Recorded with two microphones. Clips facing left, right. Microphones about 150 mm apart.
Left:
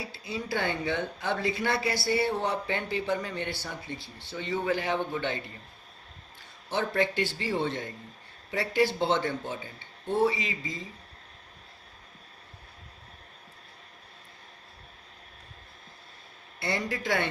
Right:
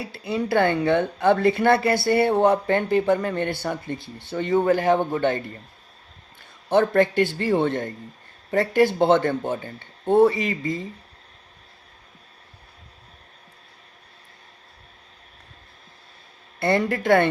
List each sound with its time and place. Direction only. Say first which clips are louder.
0.0 s speech: right 9 dB; 60° right (ahead or behind)
6.7 s speech: right 10 dB; 55° right (ahead or behind)
16.6 s speech: right 10 dB; 55° right (ahead or behind)